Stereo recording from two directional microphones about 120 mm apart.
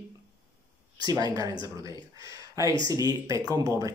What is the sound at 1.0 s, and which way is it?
A man's voice, 30° right (ahead or behind).